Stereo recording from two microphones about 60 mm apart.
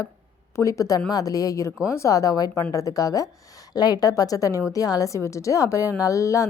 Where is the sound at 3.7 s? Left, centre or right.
Left.